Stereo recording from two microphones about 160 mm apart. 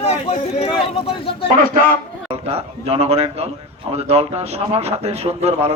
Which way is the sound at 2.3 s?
40° right (ahead or behind).